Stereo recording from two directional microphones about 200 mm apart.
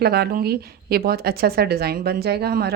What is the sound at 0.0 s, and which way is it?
Speech, 50° right (ahead or behind).